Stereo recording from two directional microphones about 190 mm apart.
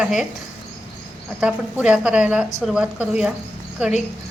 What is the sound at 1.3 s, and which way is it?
A woman's voice, 5° right (ahead or behind).